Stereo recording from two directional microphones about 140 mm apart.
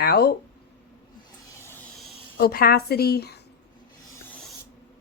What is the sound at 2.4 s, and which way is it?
Speech, 90° left.